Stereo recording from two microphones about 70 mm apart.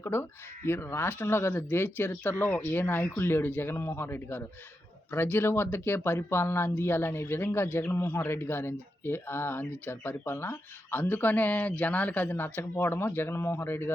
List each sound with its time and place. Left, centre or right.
0.0 s speech: left